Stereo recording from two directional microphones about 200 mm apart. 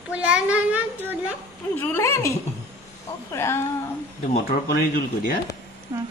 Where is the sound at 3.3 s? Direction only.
10° left (ahead or behind).